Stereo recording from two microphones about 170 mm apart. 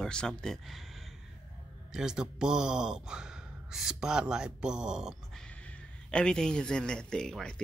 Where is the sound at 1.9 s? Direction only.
5° right (ahead or behind).